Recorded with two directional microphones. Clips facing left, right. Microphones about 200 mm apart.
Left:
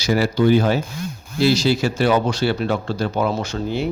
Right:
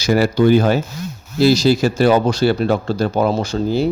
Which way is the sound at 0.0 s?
45° right (ahead or behind).